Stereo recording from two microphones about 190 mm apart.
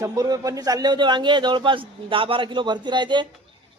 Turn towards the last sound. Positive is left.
turn(degrees=-25)  # may be behind; listen again after turning